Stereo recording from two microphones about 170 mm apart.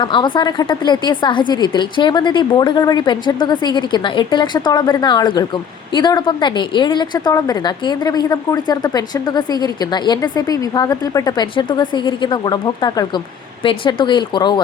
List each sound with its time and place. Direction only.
0.0 s a woman's voice: 25° left (ahead or behind)